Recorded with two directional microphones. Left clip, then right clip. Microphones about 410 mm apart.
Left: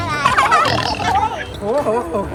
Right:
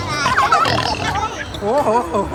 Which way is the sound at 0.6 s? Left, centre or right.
Centre.